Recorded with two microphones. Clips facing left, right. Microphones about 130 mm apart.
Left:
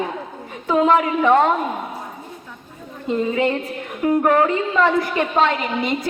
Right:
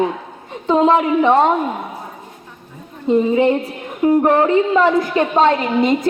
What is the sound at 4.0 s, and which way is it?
A woman's voice, 30° right (ahead or behind).